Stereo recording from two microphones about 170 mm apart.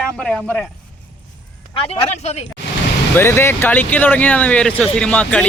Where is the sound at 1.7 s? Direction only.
35° left (ahead or behind).